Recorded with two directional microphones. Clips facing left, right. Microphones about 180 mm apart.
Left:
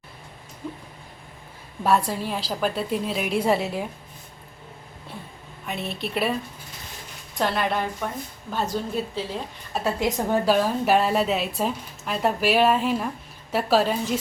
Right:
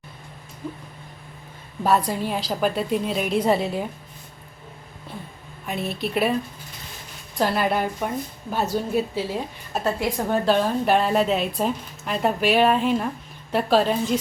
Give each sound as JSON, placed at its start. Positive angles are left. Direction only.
{"t": 1.8, "sound": "a woman's voice", "side_deg": 0}
{"t": 5.6, "sound": "a woman's voice", "side_deg": 0}
{"t": 7.3, "sound": "a woman's voice", "side_deg": -5}
{"t": 9.8, "sound": "a woman's voice", "side_deg": 20}